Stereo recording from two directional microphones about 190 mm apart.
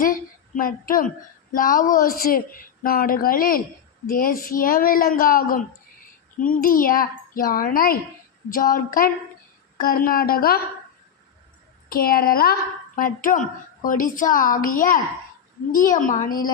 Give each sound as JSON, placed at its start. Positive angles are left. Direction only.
{"t": 0.0, "sound": "a sound", "side_deg": 45}
{"t": 1.5, "sound": "a woman's voice", "side_deg": 45}
{"t": 11.9, "sound": "a woman's voice", "side_deg": 50}